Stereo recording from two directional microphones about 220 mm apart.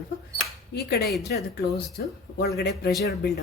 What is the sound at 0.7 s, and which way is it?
Speech, 45° left (ahead or behind).